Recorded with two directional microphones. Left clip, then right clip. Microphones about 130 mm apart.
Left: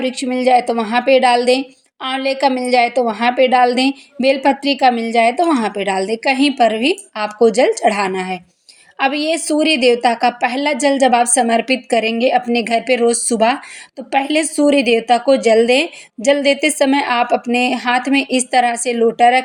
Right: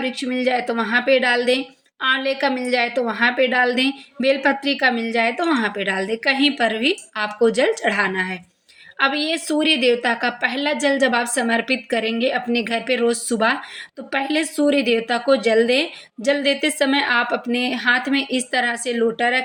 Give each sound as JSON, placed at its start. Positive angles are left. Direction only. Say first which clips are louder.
{"t": 0.0, "sound": "a woman's voice", "louder": "left 5 dB", "side_deg": 25}